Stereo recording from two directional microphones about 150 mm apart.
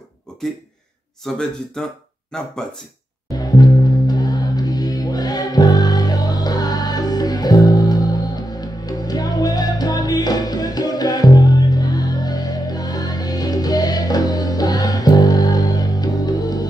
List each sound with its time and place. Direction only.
1.2 s speech: 5° left (ahead or behind)
3.3 s music: 25° left (ahead or behind)